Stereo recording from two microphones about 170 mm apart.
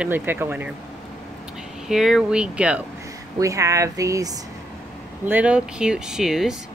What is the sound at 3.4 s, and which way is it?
Speech, 20° right (ahead or behind).